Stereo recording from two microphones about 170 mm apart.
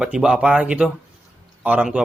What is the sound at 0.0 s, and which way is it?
Speech, 5° right (ahead or behind).